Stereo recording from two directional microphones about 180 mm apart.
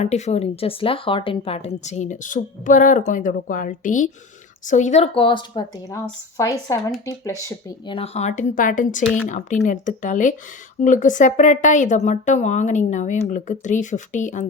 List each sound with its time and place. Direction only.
0.0 s a woman's voice: 40° left (ahead or behind); by 7.9 s 15° left (ahead or behind)
7.9 s a woman's voice: 35° left (ahead or behind)